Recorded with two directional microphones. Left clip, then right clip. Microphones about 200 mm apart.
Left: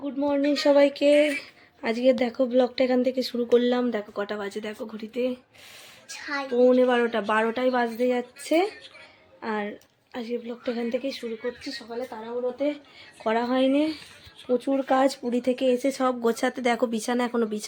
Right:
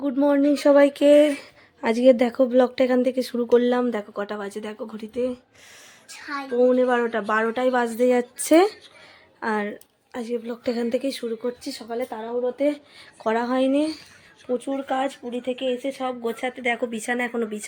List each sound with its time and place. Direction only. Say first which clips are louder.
0.0 s a sound: right 6 dB; 30° right (ahead or behind)
0.3 s a woman's voice: right 2 dB; 20° right (ahead or behind)
6.1 s a child's voice: left 1 dB; 40° right (ahead or behind)
6.5 s a woman's voice: right 1 dB; centre (ahead or behind); by 8.3 s 20° right (ahead or behind)
8.4 s a child's voice: right 7 dB; 35° right (ahead or behind)
9.4 s a woman's voice: right 4 dB; 15° right (ahead or behind)
13.2 s a woman's voice: right 1 dB; 10° right (ahead or behind)
14.4 s speech: left 1 dB; 10° left (ahead or behind)
14.7 s speech: left 5 dB; 20° left (ahead or behind)